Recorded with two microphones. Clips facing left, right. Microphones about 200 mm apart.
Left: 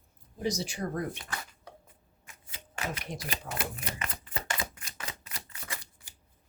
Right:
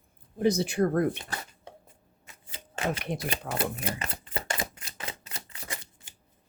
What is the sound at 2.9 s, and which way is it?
Speech, 60° right (ahead or behind).